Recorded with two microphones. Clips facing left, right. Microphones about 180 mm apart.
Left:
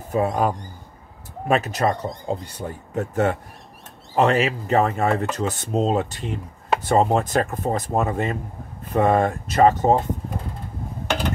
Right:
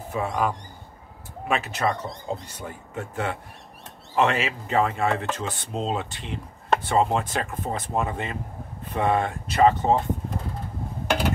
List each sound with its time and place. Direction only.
0.1 s speech: 40° left (ahead or behind)
11.1 s mechanisms: 5° right (ahead or behind)